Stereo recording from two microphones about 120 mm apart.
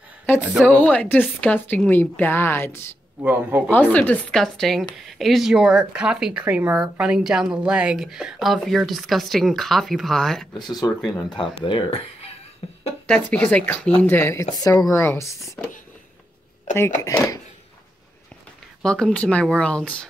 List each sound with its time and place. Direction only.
0.4 s speech: 10° right (ahead or behind)
0.7 s a woman's voice: 10° left (ahead or behind)
3.2 s speech: 15° right (ahead or behind)
3.7 s a woman's voice: 15° left (ahead or behind); by 11.1 s centre (ahead or behind)
11.2 s speech: 45° left (ahead or behind)
13.0 s a woman's voice: 10° left (ahead or behind)
16.7 s speech: 25° left (ahead or behind)
18.8 s a woman's voice: 5° left (ahead or behind)